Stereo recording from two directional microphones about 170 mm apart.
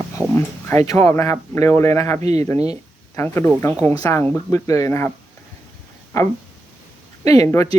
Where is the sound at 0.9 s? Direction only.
20° left (ahead or behind).